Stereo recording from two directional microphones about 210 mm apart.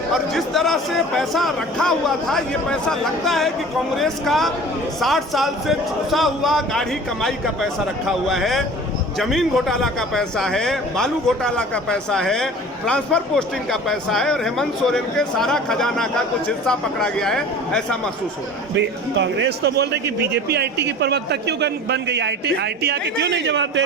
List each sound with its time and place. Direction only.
0.1 s a man's voice: centre (ahead or behind)
18.8 s a man's voice: 60° right (ahead or behind)